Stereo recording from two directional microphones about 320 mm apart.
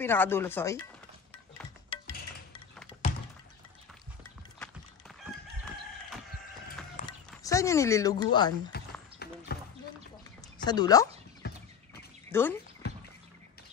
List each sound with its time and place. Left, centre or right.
0.0 s speech: centre
1.9 s music: centre
7.0 s speech: centre
9.2 s basketball bounce: left
10.6 s speech: centre
11.4 s a sound: left
12.3 s speech: centre
12.8 s bird: left